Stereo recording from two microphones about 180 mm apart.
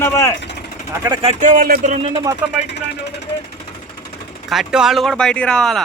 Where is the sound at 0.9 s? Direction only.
15° right (ahead or behind).